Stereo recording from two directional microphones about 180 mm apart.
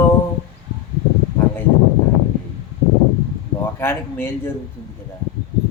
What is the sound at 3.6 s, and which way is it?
Speech, 10° left (ahead or behind).